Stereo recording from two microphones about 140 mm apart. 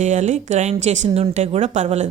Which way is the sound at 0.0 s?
55° right (ahead or behind).